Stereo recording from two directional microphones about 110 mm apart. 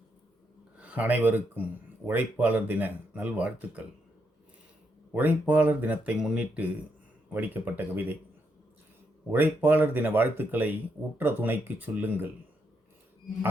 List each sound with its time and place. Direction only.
0.8 s speech: 15° right (ahead or behind)
5.1 s speech: 15° right (ahead or behind)
9.3 s speech: 20° right (ahead or behind)